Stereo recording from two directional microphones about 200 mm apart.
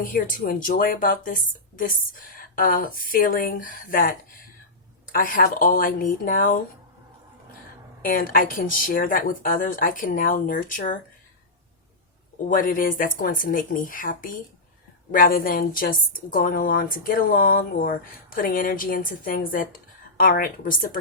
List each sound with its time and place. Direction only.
0.0 s a woman's voice: 45° left (ahead or behind)
5.1 s a woman's voice: 45° left (ahead or behind)
8.0 s a woman's voice: 45° left (ahead or behind)
12.5 s a woman's voice: 45° left (ahead or behind)